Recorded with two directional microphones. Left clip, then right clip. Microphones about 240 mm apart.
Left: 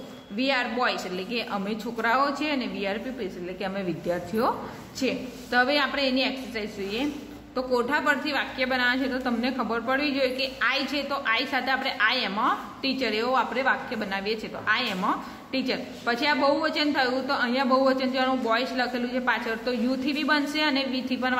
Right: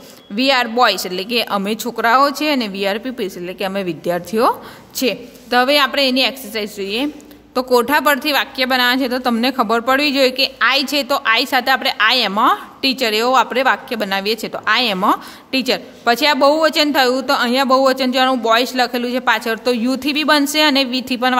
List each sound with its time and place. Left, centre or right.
0.4 s a woman's voice: right